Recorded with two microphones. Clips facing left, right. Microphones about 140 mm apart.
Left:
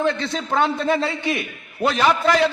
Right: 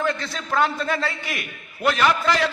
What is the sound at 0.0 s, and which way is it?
A man's voice, 25° left (ahead or behind).